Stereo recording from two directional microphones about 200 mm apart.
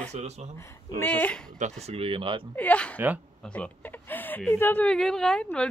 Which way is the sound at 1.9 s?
30° right (ahead or behind).